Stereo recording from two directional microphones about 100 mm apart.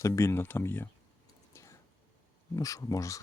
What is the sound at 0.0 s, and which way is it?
Speech, 30° left (ahead or behind).